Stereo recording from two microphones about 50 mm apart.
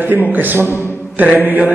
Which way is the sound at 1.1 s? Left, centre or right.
Right.